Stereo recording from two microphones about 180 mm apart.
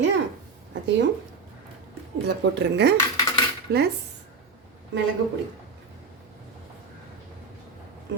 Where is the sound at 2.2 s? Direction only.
65° right (ahead or behind).